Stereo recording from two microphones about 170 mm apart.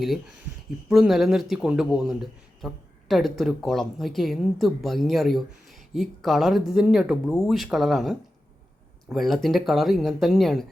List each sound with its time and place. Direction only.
0.0 s speech: centre (ahead or behind)